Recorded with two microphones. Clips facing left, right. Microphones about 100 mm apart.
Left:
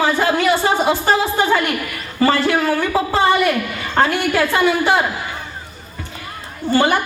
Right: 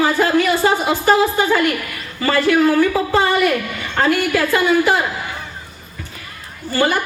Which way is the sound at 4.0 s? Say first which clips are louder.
Even; 30° left (ahead or behind).